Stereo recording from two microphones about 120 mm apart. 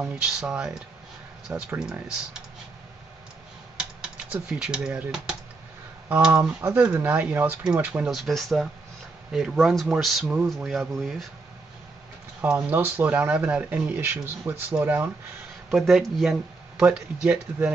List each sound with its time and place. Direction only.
0.0 s speech: 10° right (ahead or behind)
4.3 s speech: 10° right (ahead or behind)
6.3 s speech: 20° right (ahead or behind)
8.1 s speech: centre (ahead or behind)
12.4 s speech: 15° right (ahead or behind)
15.7 s speech: centre (ahead or behind)